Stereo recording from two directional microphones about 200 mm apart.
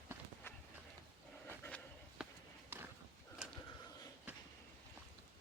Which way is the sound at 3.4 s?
5° right (ahead or behind).